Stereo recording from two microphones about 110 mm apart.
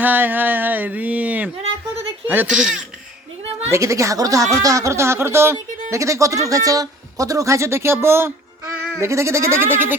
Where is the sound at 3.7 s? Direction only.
30° right (ahead or behind).